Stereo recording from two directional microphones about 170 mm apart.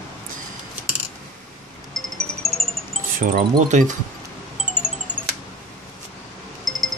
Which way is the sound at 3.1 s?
50° right (ahead or behind).